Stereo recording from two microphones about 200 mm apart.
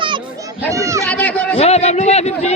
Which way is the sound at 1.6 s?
30° left (ahead or behind).